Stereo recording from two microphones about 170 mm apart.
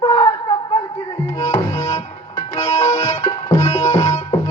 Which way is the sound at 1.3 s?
40° left (ahead or behind).